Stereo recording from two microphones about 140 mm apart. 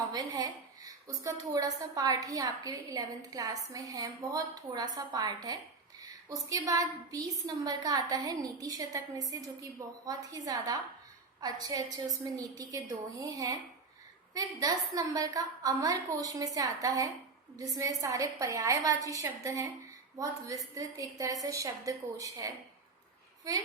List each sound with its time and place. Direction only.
0.1 s a woman's voice: 25° right (ahead or behind)